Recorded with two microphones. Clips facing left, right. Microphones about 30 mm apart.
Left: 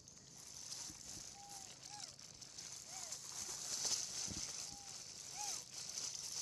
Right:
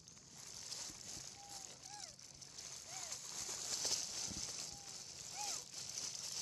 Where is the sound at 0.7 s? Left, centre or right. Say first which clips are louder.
Right 1 dB; right.